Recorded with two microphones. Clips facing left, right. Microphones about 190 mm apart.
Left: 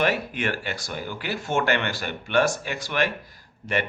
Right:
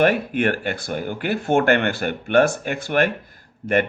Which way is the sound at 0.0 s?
50° right (ahead or behind).